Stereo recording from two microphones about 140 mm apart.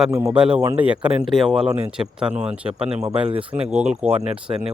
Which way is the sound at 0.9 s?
10° right (ahead or behind).